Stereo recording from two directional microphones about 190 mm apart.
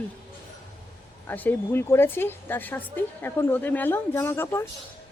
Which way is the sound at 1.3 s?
10° left (ahead or behind).